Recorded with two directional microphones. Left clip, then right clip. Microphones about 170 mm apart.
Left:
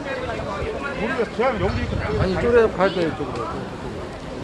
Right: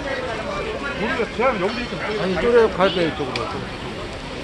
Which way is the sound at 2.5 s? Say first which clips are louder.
Right 1 dB; 30° right (ahead or behind).